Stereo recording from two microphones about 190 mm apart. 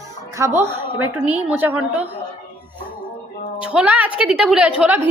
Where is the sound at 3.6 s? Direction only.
5° right (ahead or behind).